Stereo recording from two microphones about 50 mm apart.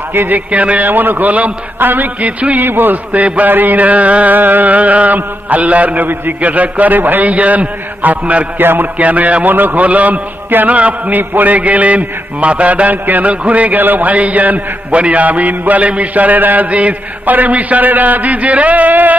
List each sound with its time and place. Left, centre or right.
0.1 s a man's voice: right
0.5 s a man's voice: right
2.6 s a man's voice: right
3.1 s a man's voice: right
8.5 s a man's voice: right
8.9 s a man's voice: right